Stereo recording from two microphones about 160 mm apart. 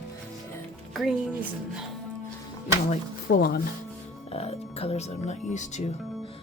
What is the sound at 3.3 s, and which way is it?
Speech, 90° left.